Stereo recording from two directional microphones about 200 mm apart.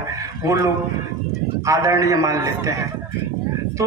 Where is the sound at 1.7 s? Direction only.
15° right (ahead or behind).